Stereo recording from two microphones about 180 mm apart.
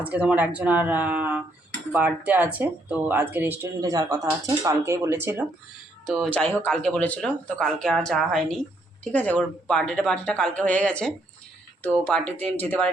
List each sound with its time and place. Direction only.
0.2 s speech: 5° right (ahead or behind)
6.1 s speech: centre (ahead or behind)